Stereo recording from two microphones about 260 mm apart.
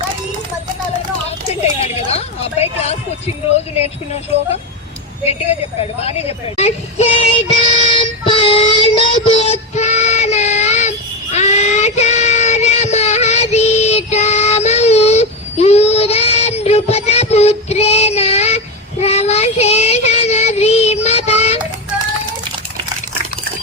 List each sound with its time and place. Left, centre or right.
1.6 s a woman's voice: left
6.0 s child singing: left